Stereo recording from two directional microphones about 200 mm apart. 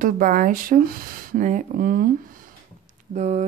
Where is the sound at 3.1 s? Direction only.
35° right (ahead or behind).